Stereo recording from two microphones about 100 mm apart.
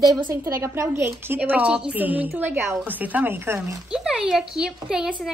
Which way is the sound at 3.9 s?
5° right (ahead or behind).